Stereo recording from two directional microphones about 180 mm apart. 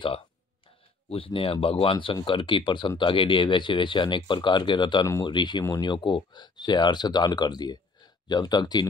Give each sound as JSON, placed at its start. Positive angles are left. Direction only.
{"t": 1.1, "sound": "speech", "side_deg": 30}